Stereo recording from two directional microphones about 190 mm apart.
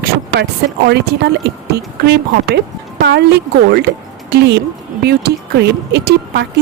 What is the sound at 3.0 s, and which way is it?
A woman's voice, 65° right (ahead or behind).